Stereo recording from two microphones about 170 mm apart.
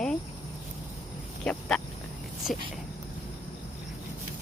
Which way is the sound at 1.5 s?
5° left (ahead or behind).